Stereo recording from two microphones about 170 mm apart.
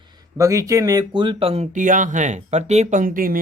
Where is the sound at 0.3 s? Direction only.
20° right (ahead or behind).